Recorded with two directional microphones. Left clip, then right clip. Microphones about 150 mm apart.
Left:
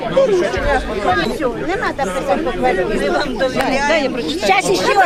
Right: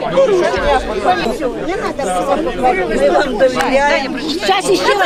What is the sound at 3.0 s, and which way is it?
Speech, 15° left (ahead or behind).